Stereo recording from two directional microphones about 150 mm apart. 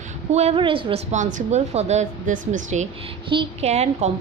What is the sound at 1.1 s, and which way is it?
A woman's voice, 50° right (ahead or behind).